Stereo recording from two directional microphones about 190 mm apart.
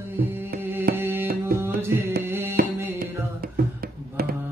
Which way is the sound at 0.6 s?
10° right (ahead or behind).